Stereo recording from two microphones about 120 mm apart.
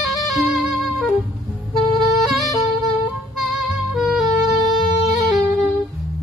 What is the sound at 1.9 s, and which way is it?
Saxophone, centre (ahead or behind).